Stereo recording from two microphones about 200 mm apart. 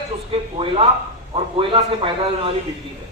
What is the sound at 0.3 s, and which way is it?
A man's voice, 25° right (ahead or behind).